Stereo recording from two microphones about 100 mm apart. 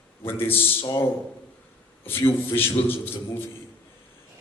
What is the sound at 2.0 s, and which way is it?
A man's voice, 25° left (ahead or behind).